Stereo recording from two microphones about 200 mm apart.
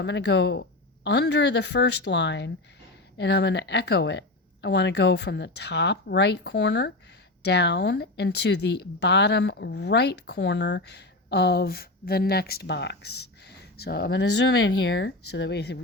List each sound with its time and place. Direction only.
0.0 s speech: 60° left (ahead or behind)